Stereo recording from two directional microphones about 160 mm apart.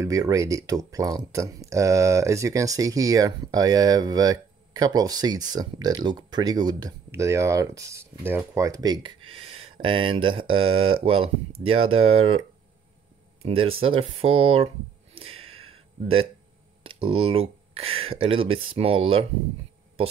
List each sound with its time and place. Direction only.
0.0 s speech: 20° right (ahead or behind); by 14.7 s 35° right (ahead or behind)
15.1 s a sound: 35° right (ahead or behind)
16.8 s speech: 30° right (ahead or behind)